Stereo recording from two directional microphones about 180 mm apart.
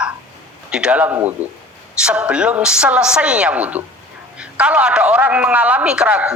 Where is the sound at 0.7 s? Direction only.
5° right (ahead or behind).